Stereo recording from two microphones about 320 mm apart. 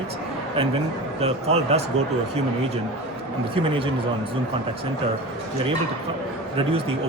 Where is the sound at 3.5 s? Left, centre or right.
Centre.